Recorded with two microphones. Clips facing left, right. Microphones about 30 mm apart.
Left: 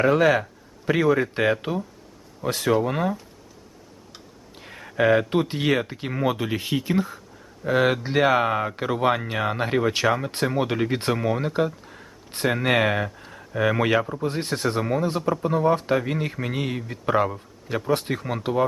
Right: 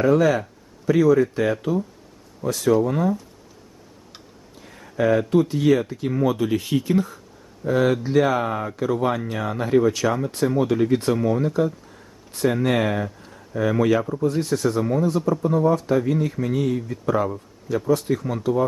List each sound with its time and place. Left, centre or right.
0.0 s a man's voice: left
4.5 s a sound: left
5.3 s a man's voice: left
6.1 s speech: left
7.6 s speech: left
15.6 s speech: left